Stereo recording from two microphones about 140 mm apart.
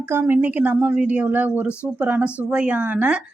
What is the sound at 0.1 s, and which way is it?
Speech, 15° right (ahead or behind).